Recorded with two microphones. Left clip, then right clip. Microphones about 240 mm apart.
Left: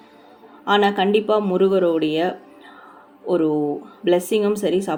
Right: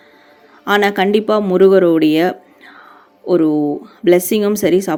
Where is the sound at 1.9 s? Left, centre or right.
Right.